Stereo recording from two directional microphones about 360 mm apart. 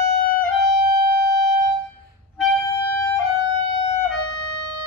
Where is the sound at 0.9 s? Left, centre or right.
Right.